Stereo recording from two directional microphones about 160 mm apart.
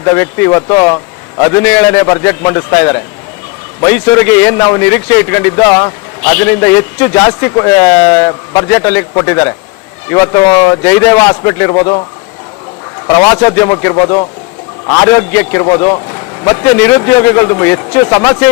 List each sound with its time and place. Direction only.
0.2 s a man's voice: 15° left (ahead or behind)
11.7 s a man's voice: 30° left (ahead or behind)
13.1 s a man's voice: 20° left (ahead or behind)
14.8 s a man's voice: 20° left (ahead or behind)